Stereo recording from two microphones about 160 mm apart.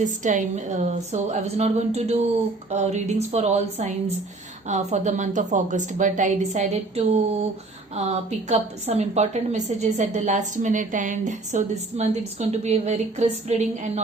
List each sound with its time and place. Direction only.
0.0 s a woman's voice: 50° right (ahead or behind)